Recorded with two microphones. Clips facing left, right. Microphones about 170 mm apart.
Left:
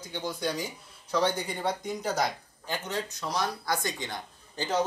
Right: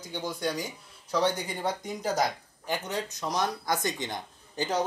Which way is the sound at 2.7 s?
15° right (ahead or behind).